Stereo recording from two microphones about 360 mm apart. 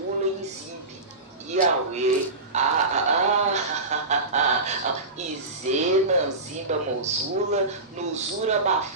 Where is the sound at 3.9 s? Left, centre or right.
Centre.